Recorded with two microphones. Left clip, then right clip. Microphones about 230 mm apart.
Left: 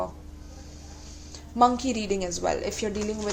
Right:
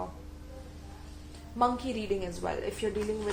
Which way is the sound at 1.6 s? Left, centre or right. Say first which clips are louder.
Left 7 dB; left.